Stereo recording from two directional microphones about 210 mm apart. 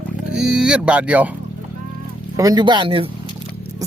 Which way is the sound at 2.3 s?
20° right (ahead or behind).